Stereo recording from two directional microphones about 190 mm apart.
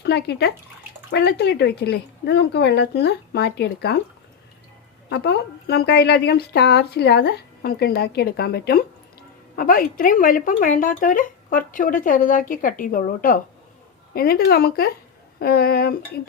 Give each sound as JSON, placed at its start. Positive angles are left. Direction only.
{"t": 0.0, "sound": "a woman's voice", "side_deg": 60}
{"t": 5.0, "sound": "a woman's voice", "side_deg": 60}